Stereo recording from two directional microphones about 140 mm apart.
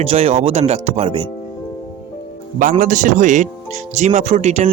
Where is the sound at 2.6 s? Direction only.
70° right (ahead or behind); by 4.6 s 55° right (ahead or behind).